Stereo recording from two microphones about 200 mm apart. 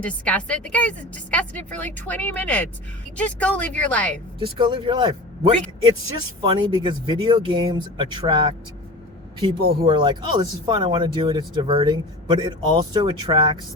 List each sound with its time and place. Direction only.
0.0 s a woman's voice: 5° left (ahead or behind)
4.4 s speech: 25° right (ahead or behind)